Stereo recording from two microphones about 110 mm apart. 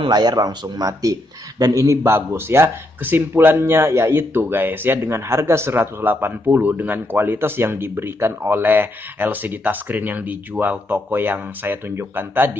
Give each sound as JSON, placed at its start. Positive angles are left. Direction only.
{"t": 0.0, "sound": "speech", "side_deg": -40}